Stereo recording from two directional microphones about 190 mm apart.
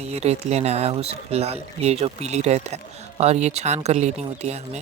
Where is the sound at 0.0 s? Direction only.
35° right (ahead or behind).